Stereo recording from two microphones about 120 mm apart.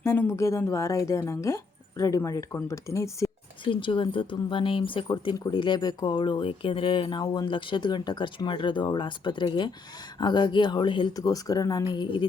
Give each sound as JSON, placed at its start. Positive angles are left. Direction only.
{"t": 0.0, "sound": "speech", "side_deg": 20}
{"t": 3.6, "sound": "speech", "side_deg": 45}
{"t": 11.2, "sound": "speech", "side_deg": 30}